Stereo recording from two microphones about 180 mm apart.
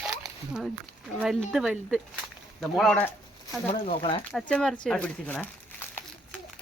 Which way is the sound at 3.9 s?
30° left (ahead or behind).